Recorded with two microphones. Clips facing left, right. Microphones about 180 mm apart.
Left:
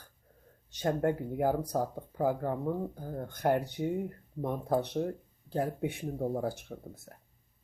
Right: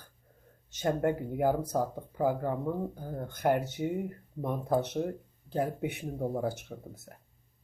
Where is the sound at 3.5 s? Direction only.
20° right (ahead or behind).